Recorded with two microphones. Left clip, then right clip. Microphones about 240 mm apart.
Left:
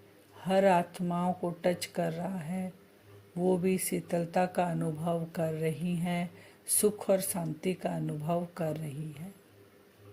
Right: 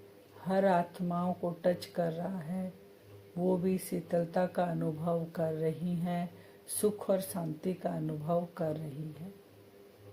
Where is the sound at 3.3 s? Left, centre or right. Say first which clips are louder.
Left 3 dB; left.